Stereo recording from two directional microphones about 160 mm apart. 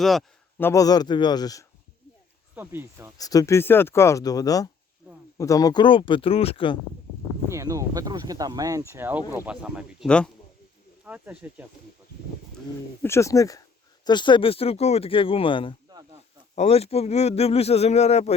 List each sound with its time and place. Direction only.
0.0 s speech: centre (ahead or behind)
0.6 s speech: 20° left (ahead or behind)
2.6 s speech: 15° right (ahead or behind)
3.2 s speech: 20° left (ahead or behind)
7.5 s speech: 20° right (ahead or behind)
10.1 s speech: 5° left (ahead or behind)
11.0 s speech: 10° right (ahead or behind)
13.0 s speech: 15° left (ahead or behind); by 18.3 s 45° left (ahead or behind)